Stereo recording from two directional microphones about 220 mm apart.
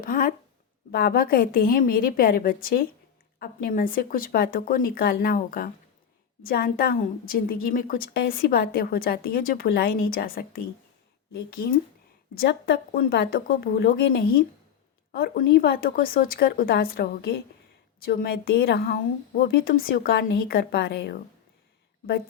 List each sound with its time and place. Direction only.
0.0 s a woman's voice: 40° left (ahead or behind)